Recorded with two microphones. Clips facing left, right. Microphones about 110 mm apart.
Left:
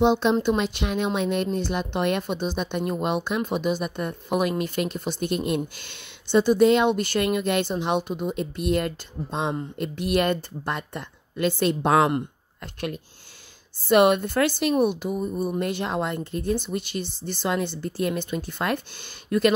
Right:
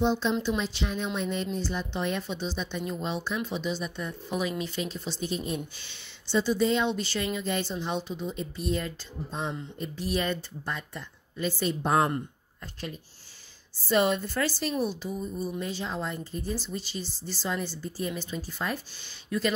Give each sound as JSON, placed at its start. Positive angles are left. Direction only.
{"t": 0.0, "sound": "speech", "side_deg": 65}
{"t": 13.7, "sound": "speech", "side_deg": 60}
{"t": 19.2, "sound": "speech", "side_deg": 55}